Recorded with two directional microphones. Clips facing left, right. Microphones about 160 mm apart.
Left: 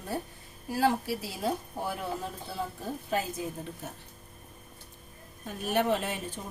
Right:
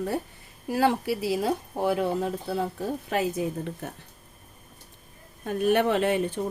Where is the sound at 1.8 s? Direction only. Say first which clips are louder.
Right 12 dB; 75° right (ahead or behind).